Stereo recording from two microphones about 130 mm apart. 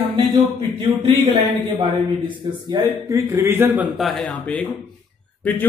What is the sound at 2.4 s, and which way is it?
Speech, 35° right (ahead or behind).